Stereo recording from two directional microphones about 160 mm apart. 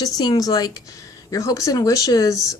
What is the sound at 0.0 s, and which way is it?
Speech, 25° left (ahead or behind).